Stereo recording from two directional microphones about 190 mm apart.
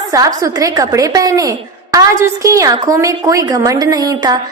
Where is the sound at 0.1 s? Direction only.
20° right (ahead or behind).